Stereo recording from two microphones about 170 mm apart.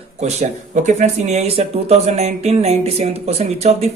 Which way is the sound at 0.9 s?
45° right (ahead or behind).